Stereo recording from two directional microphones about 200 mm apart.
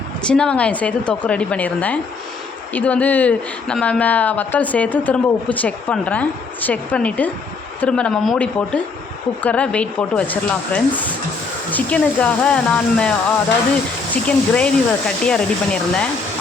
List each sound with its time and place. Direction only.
0.3 s speech: 5° left (ahead or behind)